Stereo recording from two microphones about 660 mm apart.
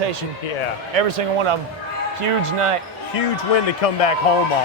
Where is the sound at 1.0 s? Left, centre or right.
Right.